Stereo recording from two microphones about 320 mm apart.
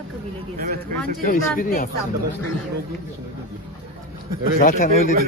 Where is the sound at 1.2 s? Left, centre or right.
Left.